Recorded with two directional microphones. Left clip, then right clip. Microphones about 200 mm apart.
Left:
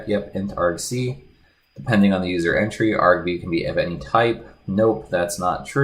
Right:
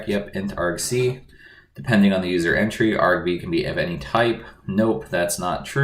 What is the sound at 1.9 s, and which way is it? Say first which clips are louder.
Speech: even; 35° left (ahead or behind).